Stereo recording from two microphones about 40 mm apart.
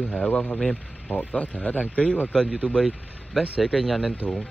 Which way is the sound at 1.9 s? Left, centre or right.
Left.